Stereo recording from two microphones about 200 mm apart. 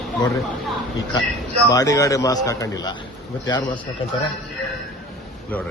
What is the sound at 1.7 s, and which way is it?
A man's voice, 15° left (ahead or behind).